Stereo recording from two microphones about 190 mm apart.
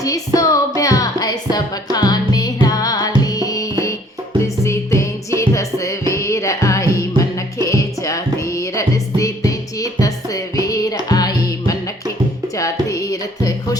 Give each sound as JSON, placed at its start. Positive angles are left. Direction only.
{"t": 0.3, "sound": "music", "side_deg": 15}
{"t": 12.9, "sound": "music", "side_deg": 20}